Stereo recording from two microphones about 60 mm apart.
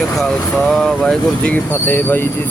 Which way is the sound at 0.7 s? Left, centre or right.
Centre.